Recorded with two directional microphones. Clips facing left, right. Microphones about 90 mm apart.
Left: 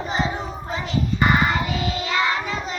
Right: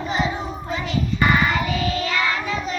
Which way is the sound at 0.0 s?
30° left (ahead or behind).